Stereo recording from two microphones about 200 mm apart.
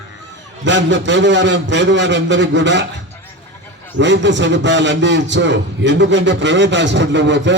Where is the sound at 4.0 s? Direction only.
65° right (ahead or behind).